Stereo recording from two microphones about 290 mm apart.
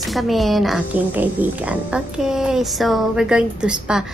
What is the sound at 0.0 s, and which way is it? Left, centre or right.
A woman's voice, centre.